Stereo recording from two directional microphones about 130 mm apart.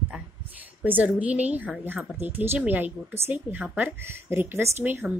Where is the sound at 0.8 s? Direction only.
10° right (ahead or behind).